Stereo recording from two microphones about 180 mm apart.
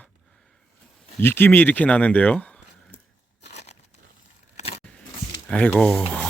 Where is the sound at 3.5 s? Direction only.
40° left (ahead or behind).